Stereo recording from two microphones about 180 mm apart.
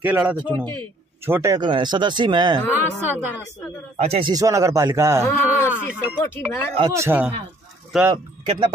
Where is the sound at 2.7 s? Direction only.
10° right (ahead or behind).